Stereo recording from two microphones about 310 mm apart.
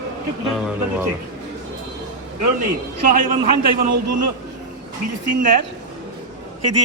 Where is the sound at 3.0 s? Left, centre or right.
Right.